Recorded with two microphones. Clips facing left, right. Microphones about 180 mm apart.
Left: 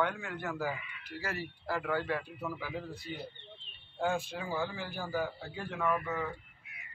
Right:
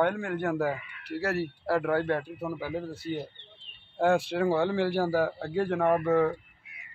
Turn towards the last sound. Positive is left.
turn(degrees=-60)  # may be behind; listen again after turning